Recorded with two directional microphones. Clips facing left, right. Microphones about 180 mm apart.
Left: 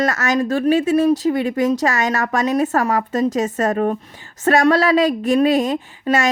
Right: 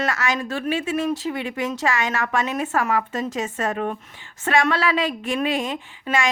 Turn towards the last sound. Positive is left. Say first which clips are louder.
# left 5 dB
turn(degrees=40)  # may be behind; listen again after turning